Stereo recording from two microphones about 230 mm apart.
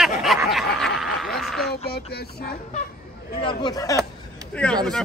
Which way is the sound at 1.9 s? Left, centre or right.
Left.